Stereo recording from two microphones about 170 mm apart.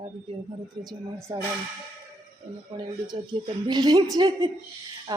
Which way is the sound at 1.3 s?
20° right (ahead or behind).